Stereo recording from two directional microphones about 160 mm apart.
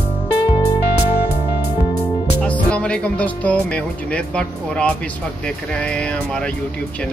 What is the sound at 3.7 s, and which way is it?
Speech, 5° left (ahead or behind).